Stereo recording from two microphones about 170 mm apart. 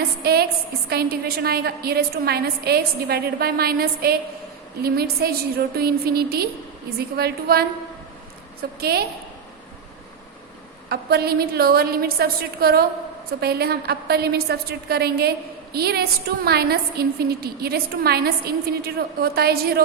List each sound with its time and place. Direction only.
0.2 s a woman's voice: 65° right (ahead or behind)
8.8 s a woman's voice: 65° right (ahead or behind)
10.8 s a woman's voice: 70° right (ahead or behind)